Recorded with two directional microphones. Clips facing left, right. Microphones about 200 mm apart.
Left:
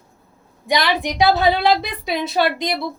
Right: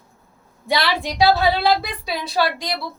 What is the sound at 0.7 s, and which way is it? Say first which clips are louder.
A woman's voice: left 2 dB; 15° left (ahead or behind).